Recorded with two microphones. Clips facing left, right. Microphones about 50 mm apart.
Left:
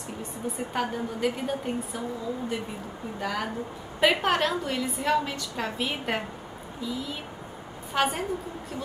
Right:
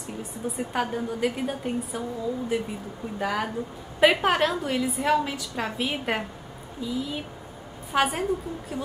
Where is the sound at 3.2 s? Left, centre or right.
Centre.